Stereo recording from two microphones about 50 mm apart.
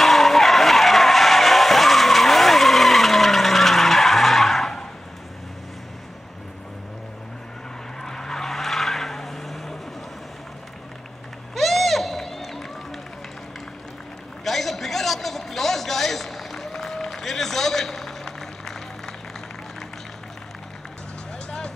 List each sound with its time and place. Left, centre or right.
0.0 s skidding: centre
8.0 s vehicle: centre
11.5 s run: centre
14.4 s a sound: centre
21.5 s music: centre